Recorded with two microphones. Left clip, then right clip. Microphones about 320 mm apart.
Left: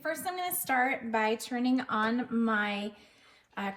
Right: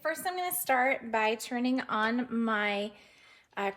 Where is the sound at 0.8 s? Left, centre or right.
Right.